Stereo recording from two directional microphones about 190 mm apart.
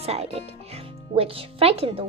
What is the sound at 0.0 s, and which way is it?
Speech, 30° right (ahead or behind).